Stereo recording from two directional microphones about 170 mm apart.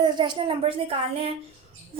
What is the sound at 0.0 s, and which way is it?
A woman's voice, 25° right (ahead or behind).